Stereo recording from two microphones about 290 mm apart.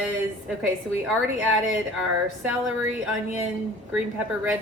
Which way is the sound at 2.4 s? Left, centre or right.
Centre.